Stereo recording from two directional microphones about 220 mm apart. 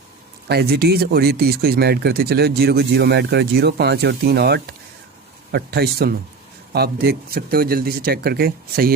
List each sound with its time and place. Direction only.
0.4 s speech: 45° right (ahead or behind)